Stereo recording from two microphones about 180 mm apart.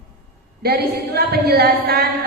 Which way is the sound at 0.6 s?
60° right (ahead or behind).